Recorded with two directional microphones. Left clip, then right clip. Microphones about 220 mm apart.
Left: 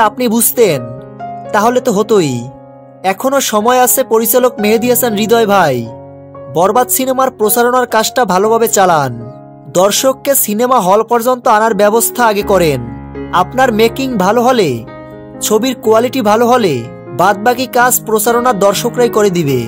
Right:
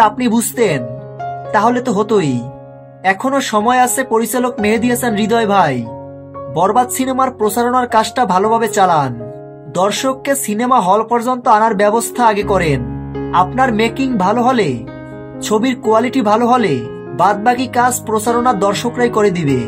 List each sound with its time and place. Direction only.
0.0 s speech: 50° left (ahead or behind)